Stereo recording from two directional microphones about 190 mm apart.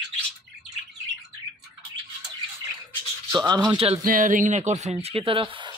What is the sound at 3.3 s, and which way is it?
Speech, 20° right (ahead or behind).